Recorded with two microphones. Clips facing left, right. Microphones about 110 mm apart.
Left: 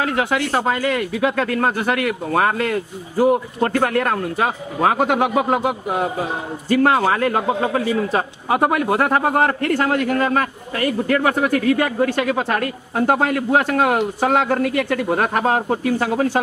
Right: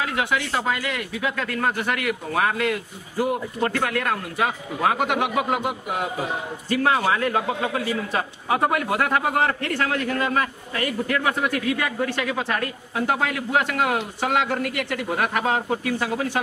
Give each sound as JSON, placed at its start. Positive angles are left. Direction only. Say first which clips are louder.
{"t": 0.0, "sound": "a man's voice", "louder": "left 5 dB", "side_deg": 40}